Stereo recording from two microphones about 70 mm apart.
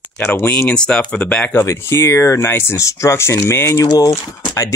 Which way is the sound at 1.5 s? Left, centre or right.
Left.